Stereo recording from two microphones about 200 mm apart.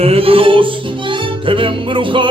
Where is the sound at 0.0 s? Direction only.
30° right (ahead or behind).